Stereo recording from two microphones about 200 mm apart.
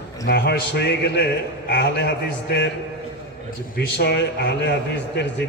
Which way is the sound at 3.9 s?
60° left (ahead or behind).